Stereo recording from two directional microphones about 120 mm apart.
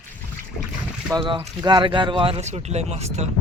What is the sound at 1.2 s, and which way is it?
Speech, 45° right (ahead or behind).